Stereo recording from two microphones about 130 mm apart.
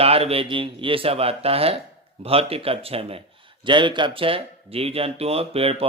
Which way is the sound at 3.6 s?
40° right (ahead or behind).